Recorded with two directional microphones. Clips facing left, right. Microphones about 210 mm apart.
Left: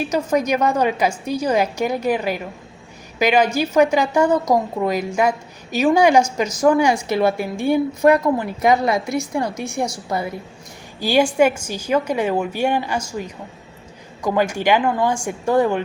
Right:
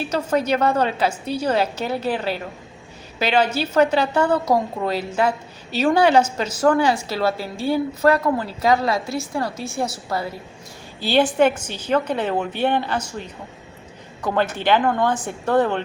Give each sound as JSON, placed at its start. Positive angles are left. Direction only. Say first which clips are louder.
{"t": 0.0, "sound": "a woman's voice", "louder": "left 2 dB", "side_deg": 10}